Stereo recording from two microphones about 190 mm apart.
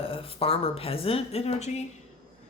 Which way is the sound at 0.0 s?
30° left (ahead or behind).